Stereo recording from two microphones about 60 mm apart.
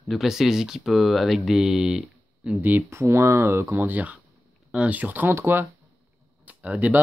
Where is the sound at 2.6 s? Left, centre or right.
Right.